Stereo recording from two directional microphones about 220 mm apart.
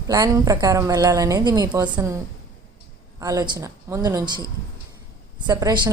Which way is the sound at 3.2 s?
15° right (ahead or behind).